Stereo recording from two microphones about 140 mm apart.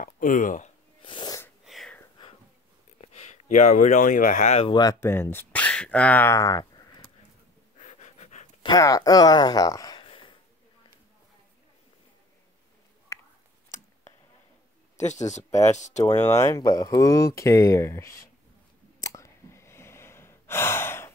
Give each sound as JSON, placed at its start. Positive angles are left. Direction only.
{"t": 0.0, "sound": "speech", "side_deg": 70}
{"t": 1.0, "sound": "sneeze", "side_deg": 30}
{"t": 1.6, "sound": "wheeze", "side_deg": 0}
{"t": 3.0, "sound": "speech", "side_deg": 50}
{"t": 4.6, "sound": "speech", "side_deg": 30}
{"t": 5.0, "sound": "speech", "side_deg": 15}
{"t": 7.8, "sound": "pant", "side_deg": 55}
{"t": 8.6, "sound": "speech", "side_deg": 25}
{"t": 10.0, "sound": "a sound", "side_deg": 35}
{"t": 13.1, "sound": "a sound", "side_deg": 20}
{"t": 15.0, "sound": "speech", "side_deg": 55}
{"t": 16.0, "sound": "speech", "side_deg": 25}
{"t": 18.9, "sound": "breathing", "side_deg": 25}